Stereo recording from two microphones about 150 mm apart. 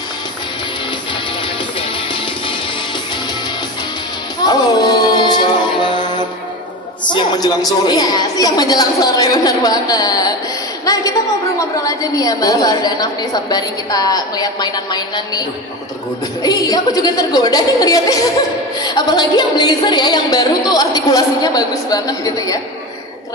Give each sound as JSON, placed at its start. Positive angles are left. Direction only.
{"t": 4.5, "sound": "music", "side_deg": 25}
{"t": 7.1, "sound": "a woman's voice", "side_deg": 30}
{"t": 16.4, "sound": "a woman's voice", "side_deg": 25}